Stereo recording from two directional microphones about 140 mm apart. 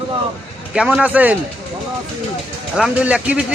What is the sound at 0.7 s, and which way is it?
Speech, 5° right (ahead or behind).